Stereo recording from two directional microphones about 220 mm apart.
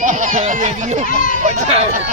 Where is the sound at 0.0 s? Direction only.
35° right (ahead or behind).